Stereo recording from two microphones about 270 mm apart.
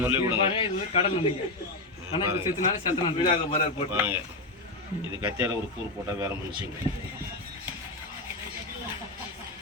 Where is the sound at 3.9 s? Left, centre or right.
Centre.